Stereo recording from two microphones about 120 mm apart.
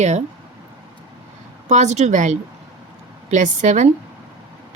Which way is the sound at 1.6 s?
70° right (ahead or behind).